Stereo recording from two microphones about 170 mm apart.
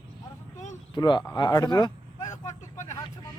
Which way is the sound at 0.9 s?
25° left (ahead or behind).